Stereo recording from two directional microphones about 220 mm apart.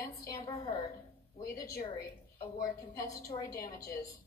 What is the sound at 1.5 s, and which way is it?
A woman's voice, 40° left (ahead or behind).